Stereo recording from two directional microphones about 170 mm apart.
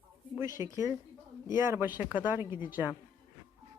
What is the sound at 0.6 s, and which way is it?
Speech, 15° right (ahead or behind).